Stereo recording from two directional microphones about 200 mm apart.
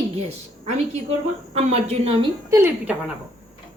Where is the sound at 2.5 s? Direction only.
10° right (ahead or behind).